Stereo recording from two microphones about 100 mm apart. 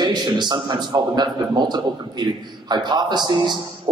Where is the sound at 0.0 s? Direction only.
45° right (ahead or behind).